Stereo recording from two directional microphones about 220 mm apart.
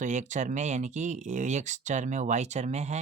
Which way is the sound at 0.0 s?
35° right (ahead or behind).